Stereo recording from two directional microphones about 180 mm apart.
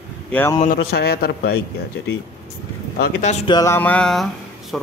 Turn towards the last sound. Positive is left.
turn(degrees=5)  # may be behind; listen again after turning